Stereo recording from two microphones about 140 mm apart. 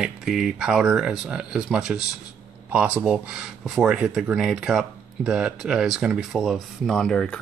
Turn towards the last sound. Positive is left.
turn(degrees=5)  # may be behind; listen again after turning